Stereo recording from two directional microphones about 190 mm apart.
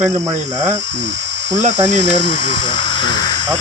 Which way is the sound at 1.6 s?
40° right (ahead or behind).